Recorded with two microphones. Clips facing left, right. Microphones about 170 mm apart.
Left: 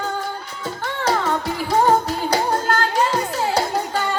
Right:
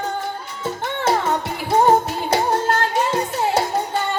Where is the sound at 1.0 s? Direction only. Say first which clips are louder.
Right 1 dB; 25° right (ahead or behind).